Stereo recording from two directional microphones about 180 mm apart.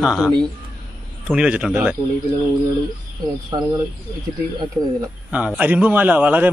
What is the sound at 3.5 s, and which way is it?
Speech, 20° right (ahead or behind).